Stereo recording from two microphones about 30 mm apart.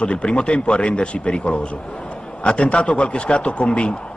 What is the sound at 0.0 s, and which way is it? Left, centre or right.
A man's voice, left.